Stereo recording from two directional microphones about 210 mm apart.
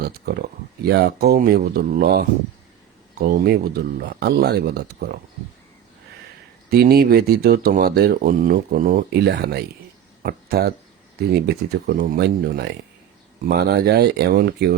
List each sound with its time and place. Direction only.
0.0 s speech: 45° right (ahead or behind)
6.7 s speech: 50° right (ahead or behind)